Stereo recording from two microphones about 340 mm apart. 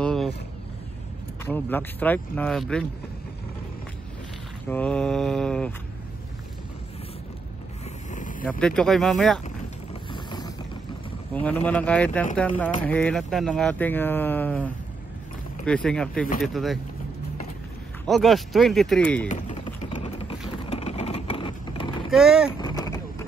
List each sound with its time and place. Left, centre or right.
0.0 s vehicle: centre
1.4 s speech: centre
4.6 s speech: centre
8.1 s vehicle: left
8.5 s speech: centre
10.1 s vehicle: centre
11.4 s speech: centre
18.0 s speech: centre
19.2 s vehicle: centre
22.1 s speech: centre
22.6 s vehicle: centre